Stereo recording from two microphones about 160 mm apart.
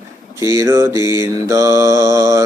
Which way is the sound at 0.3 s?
20° right (ahead or behind).